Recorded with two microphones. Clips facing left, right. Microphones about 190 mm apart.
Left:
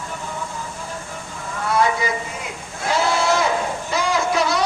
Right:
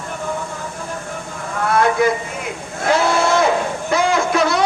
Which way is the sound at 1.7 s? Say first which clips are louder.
Right 3 dB; 60° right (ahead or behind).